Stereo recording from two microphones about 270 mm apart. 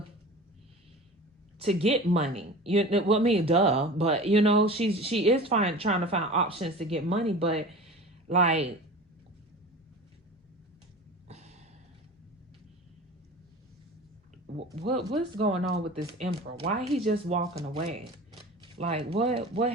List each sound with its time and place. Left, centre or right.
1.5 s speech: right
11.3 s a sound: right
14.8 s speech: right